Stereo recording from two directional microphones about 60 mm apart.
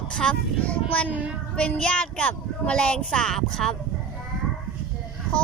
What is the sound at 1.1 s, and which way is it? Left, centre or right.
Child singing, right.